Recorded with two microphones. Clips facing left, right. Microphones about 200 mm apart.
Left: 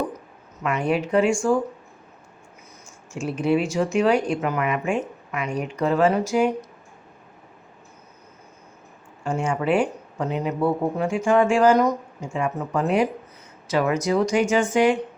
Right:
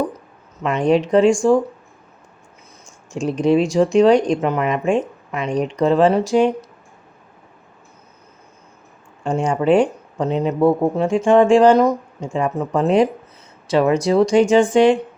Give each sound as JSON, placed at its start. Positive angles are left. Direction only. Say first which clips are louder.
{"t": 0.6, "sound": "speech", "louder": "right 6 dB", "side_deg": -30}
{"t": 3.1, "sound": "speech", "louder": "right 5 dB", "side_deg": -35}
{"t": 9.2, "sound": "speech", "louder": "right 6 dB", "side_deg": -35}